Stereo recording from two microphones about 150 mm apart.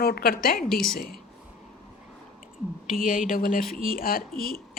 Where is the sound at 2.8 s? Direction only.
5° right (ahead or behind).